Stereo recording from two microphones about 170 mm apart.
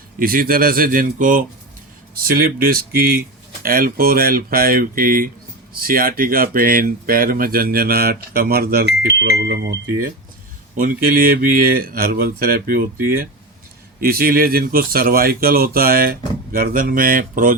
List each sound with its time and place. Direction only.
0.2 s speech: 60° right (ahead or behind); by 10.1 s 75° right (ahead or behind)
10.8 s speech: 55° right (ahead or behind)